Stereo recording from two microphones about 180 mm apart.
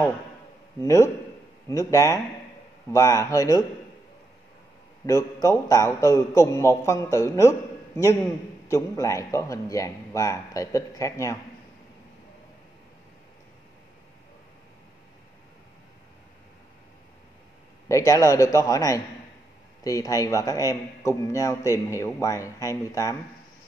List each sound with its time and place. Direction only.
0.7 s a man's voice: 15° left (ahead or behind)
5.0 s a man's voice: 15° left (ahead or behind)
17.8 s a man's voice: 20° left (ahead or behind)